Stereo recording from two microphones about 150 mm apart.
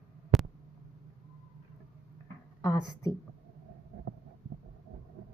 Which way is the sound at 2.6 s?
20° left (ahead or behind).